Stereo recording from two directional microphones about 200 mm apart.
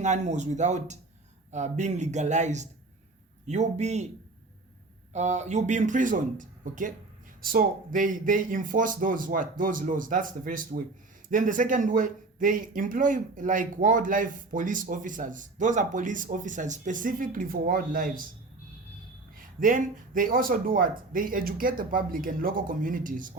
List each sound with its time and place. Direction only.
0.0 s speech: 35° right (ahead or behind)
5.1 s speech: 35° right (ahead or behind)
19.4 s speech: 40° right (ahead or behind)